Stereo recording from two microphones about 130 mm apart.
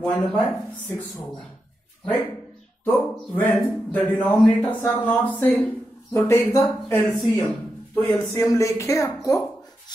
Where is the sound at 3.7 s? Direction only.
10° left (ahead or behind).